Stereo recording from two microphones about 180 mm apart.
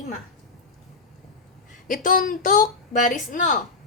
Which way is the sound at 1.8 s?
50° left (ahead or behind).